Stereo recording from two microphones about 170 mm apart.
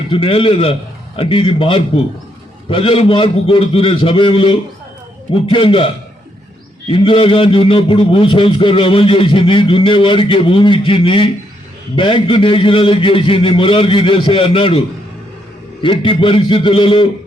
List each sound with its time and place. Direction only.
0.1 s a man's voice: 35° left (ahead or behind)
15.8 s a man's voice: 30° left (ahead or behind)